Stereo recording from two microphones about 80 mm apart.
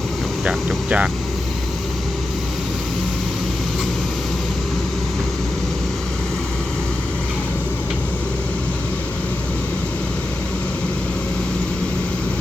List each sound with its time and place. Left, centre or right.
0.9 s speech: centre